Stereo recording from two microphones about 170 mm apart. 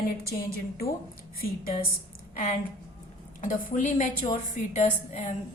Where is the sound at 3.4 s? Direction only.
50° left (ahead or behind).